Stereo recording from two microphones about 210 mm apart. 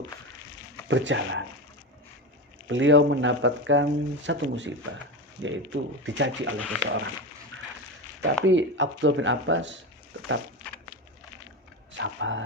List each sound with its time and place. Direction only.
0.9 s speech: 60° right (ahead or behind)
2.6 s speech: 60° right (ahead or behind)
8.2 s speech: 55° right (ahead or behind)
11.9 s speech: 65° right (ahead or behind)